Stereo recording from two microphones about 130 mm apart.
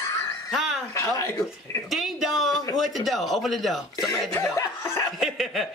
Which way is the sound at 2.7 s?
Centre (ahead or behind).